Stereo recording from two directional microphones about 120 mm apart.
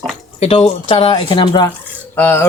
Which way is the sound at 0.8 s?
50° left (ahead or behind).